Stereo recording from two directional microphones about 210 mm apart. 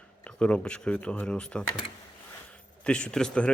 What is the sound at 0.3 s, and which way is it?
Speech, 5° left (ahead or behind).